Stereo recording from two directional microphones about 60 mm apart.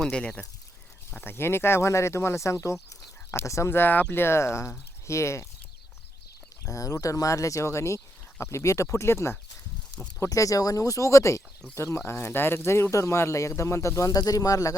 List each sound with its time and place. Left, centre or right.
0.0 s speech: centre
1.2 s speech: left
3.7 s speech: left
6.7 s speech: left
10.2 s speech: left